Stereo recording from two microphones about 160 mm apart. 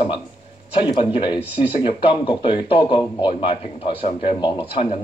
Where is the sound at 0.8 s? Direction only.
30° left (ahead or behind).